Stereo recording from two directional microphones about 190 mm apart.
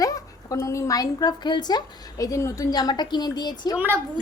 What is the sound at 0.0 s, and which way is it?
Speech, 20° left (ahead or behind).